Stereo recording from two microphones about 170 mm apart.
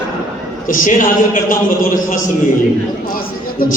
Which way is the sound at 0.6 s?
50° left (ahead or behind).